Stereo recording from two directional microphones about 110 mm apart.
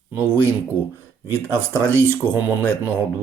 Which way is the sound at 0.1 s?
20° right (ahead or behind).